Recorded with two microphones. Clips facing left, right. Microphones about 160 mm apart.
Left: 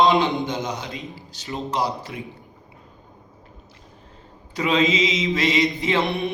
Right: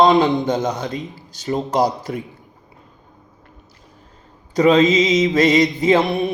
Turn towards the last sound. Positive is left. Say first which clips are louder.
# right 6 dB
turn(degrees=-45)  # may be behind; listen again after turning